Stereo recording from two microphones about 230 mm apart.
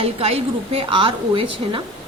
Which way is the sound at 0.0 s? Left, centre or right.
Right.